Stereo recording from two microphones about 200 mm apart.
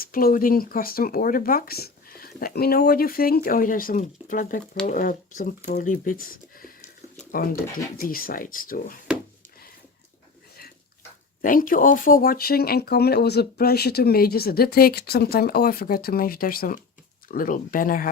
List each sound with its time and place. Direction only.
0.0 s speech: 45° left (ahead or behind)
11.4 s speech: 45° left (ahead or behind)